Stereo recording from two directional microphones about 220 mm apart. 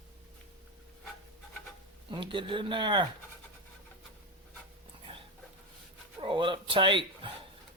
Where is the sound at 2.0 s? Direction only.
20° right (ahead or behind).